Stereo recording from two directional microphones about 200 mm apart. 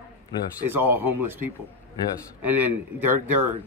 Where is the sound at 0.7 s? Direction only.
10° right (ahead or behind).